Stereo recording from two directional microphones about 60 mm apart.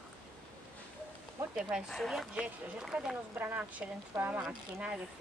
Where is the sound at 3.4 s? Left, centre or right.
Right.